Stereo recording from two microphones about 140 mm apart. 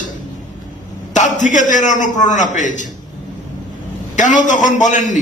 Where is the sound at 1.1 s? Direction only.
60° left (ahead or behind).